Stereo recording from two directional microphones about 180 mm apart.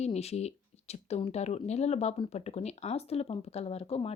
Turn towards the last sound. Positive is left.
turn(degrees=35)  # may be behind; listen again after turning